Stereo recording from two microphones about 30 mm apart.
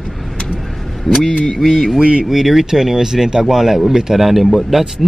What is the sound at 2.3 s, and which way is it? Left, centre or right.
Speech, centre.